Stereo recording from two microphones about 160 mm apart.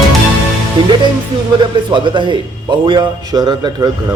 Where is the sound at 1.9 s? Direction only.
30° right (ahead or behind).